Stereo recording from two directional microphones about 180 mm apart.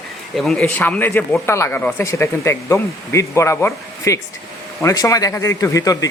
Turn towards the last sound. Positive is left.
turn(degrees=20)  # may be behind; listen again after turning